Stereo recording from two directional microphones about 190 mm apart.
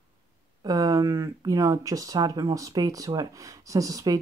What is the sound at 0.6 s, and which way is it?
Speech, 20° right (ahead or behind).